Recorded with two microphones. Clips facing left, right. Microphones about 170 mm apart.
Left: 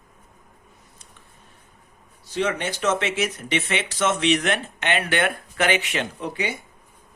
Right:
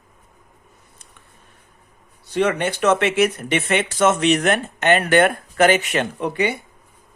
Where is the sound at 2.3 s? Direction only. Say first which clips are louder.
Right 5 dB; 60° right (ahead or behind).